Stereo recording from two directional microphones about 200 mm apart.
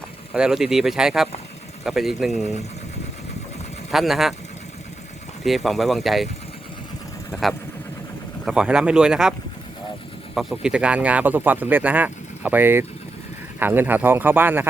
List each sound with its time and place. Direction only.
0.3 s speech: 5° right (ahead or behind)
3.9 s speech: centre (ahead or behind)
5.4 s speech: centre (ahead or behind)
7.3 s speech: centre (ahead or behind)
10.3 s speech: 5° right (ahead or behind)